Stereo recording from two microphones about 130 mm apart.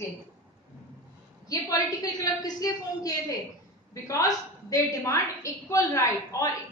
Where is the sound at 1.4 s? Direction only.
30° left (ahead or behind).